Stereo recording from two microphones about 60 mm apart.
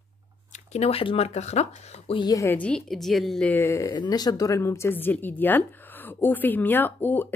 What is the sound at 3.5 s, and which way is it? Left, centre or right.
Speech, left.